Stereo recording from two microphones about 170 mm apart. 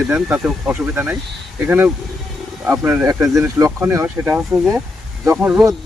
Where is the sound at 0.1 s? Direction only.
10° right (ahead or behind).